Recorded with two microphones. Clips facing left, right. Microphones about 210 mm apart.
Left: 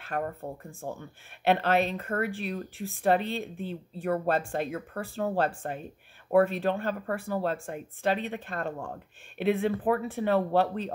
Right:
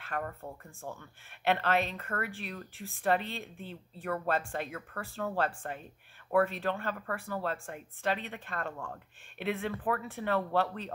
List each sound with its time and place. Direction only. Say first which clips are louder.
0.0 s a woman's voice: left 5 dB; 35° left (ahead or behind)